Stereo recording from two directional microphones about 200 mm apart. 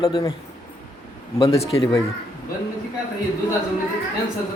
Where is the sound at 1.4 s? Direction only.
30° left (ahead or behind).